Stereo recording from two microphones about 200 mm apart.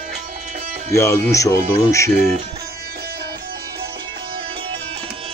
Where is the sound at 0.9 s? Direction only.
15° left (ahead or behind).